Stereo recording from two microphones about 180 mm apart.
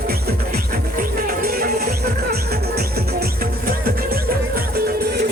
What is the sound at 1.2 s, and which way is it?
Music, 55° right (ahead or behind).